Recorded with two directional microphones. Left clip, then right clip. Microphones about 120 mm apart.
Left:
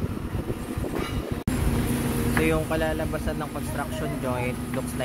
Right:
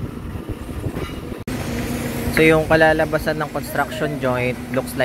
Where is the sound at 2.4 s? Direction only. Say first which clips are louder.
Right 14 dB; 60° right (ahead or behind).